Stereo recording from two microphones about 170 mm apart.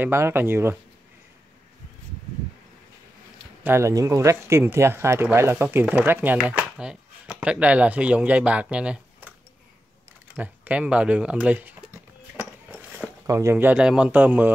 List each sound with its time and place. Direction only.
0.0 s speech: 15° right (ahead or behind)
3.6 s speech: 15° right (ahead or behind)
10.3 s speech: 10° right (ahead or behind)